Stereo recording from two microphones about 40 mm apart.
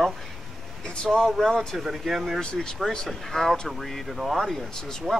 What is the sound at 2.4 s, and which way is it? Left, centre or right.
Speech, left.